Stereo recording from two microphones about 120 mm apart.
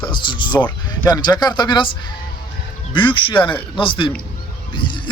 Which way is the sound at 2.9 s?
45° left (ahead or behind).